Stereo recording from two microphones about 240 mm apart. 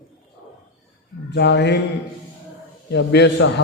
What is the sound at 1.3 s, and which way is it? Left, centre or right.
Speech, left.